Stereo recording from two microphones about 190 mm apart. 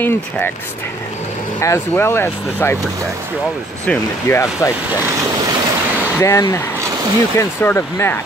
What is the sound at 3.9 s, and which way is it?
Speech, 15° left (ahead or behind).